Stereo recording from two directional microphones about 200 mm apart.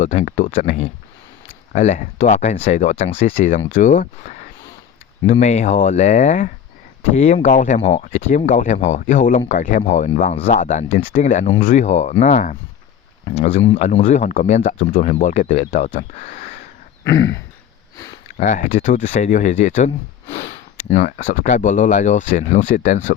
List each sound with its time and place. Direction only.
0.0 s speech: 35° left (ahead or behind)
17.0 s throat clearing: 15° left (ahead or behind)
17.9 s sniff: 20° left (ahead or behind)
18.3 s speech: 40° left (ahead or behind)